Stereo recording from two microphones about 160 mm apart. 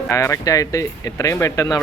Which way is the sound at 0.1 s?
20° left (ahead or behind).